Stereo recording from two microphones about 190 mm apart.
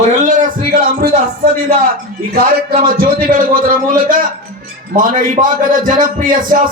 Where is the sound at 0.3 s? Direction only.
45° right (ahead or behind).